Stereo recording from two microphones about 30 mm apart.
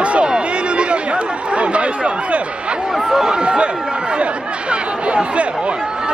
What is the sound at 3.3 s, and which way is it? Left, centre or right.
Speech, right.